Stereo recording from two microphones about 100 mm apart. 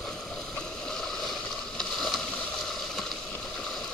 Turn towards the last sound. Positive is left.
turn(degrees=0)  # may be behind; listen again after turning